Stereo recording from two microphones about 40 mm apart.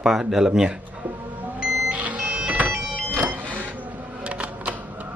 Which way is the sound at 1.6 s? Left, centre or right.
Right.